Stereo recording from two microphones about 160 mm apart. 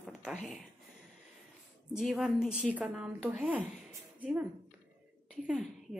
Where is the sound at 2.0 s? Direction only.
Centre (ahead or behind).